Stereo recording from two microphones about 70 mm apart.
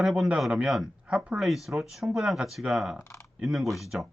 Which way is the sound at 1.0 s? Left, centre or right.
Centre.